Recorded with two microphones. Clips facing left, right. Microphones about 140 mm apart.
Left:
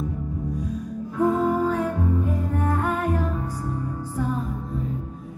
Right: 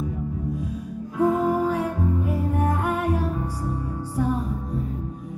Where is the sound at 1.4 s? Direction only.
10° right (ahead or behind).